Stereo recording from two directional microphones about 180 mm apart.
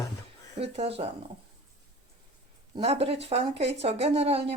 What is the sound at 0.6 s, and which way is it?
Speech, 35° right (ahead or behind).